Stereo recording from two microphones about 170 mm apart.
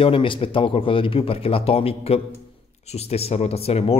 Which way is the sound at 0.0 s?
30° left (ahead or behind).